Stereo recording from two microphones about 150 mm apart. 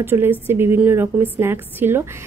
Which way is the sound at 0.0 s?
15° right (ahead or behind).